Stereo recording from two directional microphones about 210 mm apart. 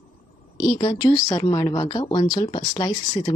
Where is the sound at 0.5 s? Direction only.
20° left (ahead or behind).